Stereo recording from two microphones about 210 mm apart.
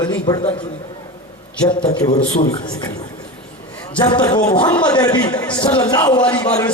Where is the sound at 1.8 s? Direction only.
30° left (ahead or behind).